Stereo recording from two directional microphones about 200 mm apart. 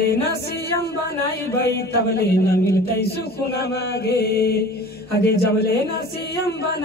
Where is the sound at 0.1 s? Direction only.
55° left (ahead or behind).